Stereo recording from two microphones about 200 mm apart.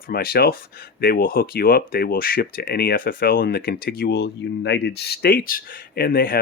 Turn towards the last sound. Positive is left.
turn(degrees=50)  # may be behind; listen again after turning